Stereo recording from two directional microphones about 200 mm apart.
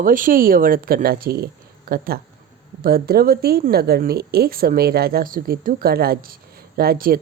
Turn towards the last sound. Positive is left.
turn(degrees=-45)  # may be behind; listen again after turning